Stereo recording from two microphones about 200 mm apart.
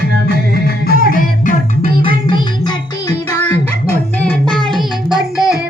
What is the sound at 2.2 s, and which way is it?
Music, 25° left (ahead or behind).